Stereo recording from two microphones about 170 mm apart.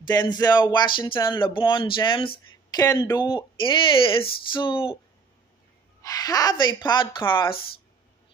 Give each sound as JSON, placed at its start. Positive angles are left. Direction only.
{"t": 0.0, "sound": "speech", "side_deg": 25}
{"t": 2.7, "sound": "speech", "side_deg": 20}
{"t": 3.3, "sound": "speech", "side_deg": 30}
{"t": 6.0, "sound": "speech", "side_deg": 20}